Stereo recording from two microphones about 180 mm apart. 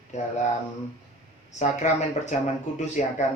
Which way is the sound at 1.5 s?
40° left (ahead or behind).